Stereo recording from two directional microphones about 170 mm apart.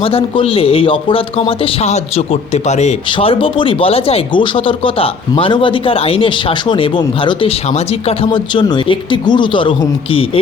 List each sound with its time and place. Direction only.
0.0 s a man's voice: 30° left (ahead or behind)